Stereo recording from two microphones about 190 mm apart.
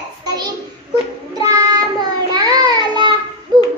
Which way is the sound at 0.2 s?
20° right (ahead or behind).